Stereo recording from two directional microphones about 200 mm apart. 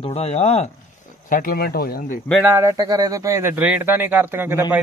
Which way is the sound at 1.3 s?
45° left (ahead or behind).